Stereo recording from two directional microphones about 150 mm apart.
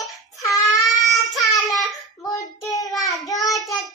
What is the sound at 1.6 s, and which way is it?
Child singing, 25° left (ahead or behind).